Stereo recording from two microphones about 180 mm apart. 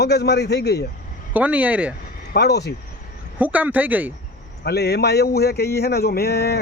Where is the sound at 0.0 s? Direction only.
65° left (ahead or behind).